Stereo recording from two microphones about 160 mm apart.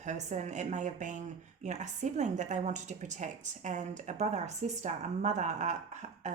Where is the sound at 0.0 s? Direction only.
50° right (ahead or behind).